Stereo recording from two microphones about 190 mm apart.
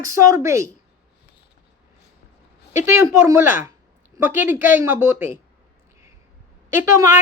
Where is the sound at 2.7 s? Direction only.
15° right (ahead or behind).